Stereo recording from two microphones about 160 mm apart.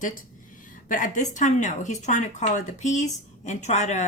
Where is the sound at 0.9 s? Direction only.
55° left (ahead or behind).